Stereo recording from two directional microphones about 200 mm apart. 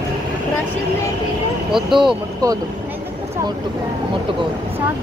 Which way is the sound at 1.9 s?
20° right (ahead or behind).